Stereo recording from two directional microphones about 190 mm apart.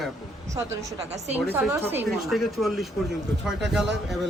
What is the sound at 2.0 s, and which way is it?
A man's voice, centre (ahead or behind).